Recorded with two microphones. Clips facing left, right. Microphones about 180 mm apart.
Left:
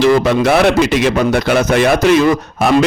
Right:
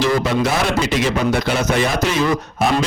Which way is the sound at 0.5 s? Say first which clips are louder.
Left 7 dB; 70° left (ahead or behind).